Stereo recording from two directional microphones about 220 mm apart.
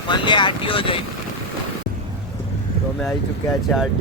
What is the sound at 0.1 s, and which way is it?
Speech, 20° left (ahead or behind).